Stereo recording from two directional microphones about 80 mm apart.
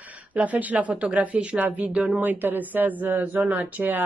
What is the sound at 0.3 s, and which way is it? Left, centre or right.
Speech, centre.